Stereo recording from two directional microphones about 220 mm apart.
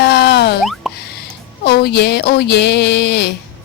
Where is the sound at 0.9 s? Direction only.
Centre (ahead or behind).